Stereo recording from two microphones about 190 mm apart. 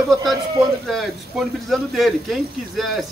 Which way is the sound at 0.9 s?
Centre (ahead or behind).